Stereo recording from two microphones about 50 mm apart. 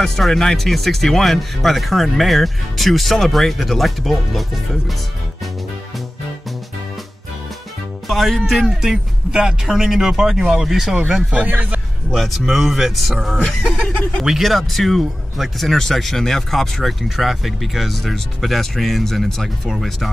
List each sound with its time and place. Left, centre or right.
0.0 s speech: centre
8.1 s speech: centre
11.3 s speech: right
12.1 s speech: centre
13.4 s speech: centre
14.2 s speech: centre